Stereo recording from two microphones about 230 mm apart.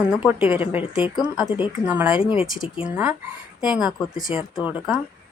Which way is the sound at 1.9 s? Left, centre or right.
Centre.